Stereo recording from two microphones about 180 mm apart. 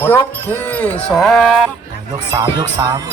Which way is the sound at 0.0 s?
10° left (ahead or behind).